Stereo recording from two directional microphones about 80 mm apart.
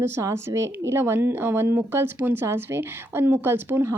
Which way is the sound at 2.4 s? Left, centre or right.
Right.